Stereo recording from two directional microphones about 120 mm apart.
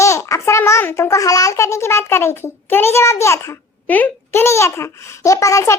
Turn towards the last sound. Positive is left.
turn(degrees=25)  # may be behind; listen again after turning